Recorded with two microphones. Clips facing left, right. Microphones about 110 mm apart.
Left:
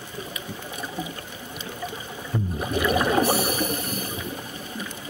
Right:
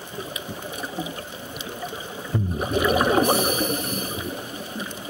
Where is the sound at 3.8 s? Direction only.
40° left (ahead or behind).